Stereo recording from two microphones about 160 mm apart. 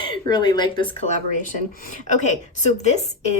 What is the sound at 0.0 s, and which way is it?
Speech, 30° left (ahead or behind).